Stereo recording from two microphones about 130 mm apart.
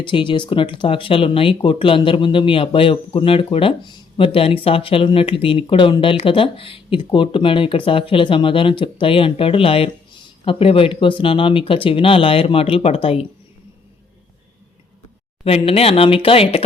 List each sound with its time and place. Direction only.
0.0 s speech: 40° left (ahead or behind)
15.4 s speech: 50° left (ahead or behind)